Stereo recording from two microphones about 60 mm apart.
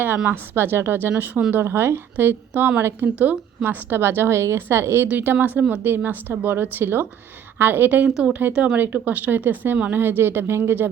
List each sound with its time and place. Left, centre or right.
0.3 s a woman's voice: right
5.1 s a woman's voice: right